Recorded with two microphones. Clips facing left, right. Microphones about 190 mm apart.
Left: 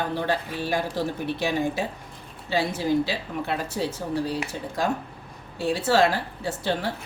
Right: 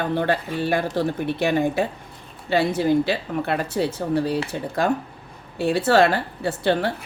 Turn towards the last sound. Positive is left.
turn(degrees=-65)  # may be behind; listen again after turning